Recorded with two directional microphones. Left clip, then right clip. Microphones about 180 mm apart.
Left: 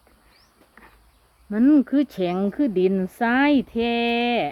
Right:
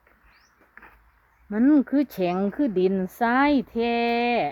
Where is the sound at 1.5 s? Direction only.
10° right (ahead or behind).